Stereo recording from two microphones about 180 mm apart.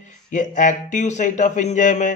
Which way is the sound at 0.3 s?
45° left (ahead or behind).